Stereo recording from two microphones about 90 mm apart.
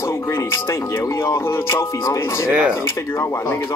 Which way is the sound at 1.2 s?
30° left (ahead or behind).